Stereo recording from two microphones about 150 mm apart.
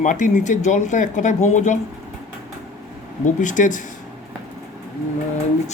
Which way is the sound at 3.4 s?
55° left (ahead or behind).